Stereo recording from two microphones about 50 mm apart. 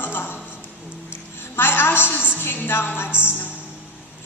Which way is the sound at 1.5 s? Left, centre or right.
Left.